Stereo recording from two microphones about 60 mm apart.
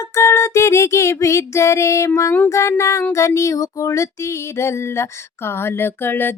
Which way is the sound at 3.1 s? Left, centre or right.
Left.